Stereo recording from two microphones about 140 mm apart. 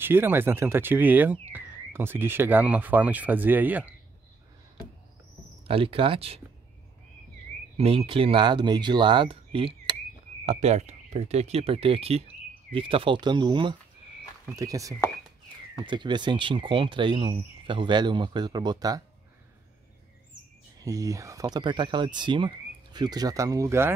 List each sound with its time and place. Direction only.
0.0 s speech: 15° right (ahead or behind)
5.7 s speech: 40° right (ahead or behind)
7.7 s speech: 45° right (ahead or behind); by 19.0 s 25° right (ahead or behind)
20.8 s speech: 25° right (ahead or behind)